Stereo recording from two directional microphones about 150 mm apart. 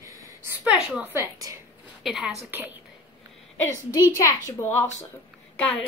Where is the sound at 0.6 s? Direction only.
5° right (ahead or behind).